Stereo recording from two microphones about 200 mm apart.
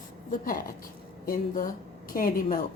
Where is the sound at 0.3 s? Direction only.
45° left (ahead or behind).